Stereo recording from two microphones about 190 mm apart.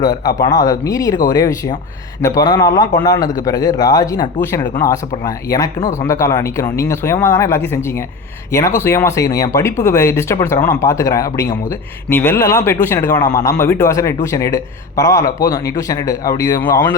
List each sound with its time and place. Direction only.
0.0 s a man's voice: 20° left (ahead or behind)